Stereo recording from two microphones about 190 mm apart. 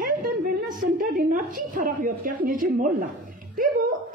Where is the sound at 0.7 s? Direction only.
45° right (ahead or behind).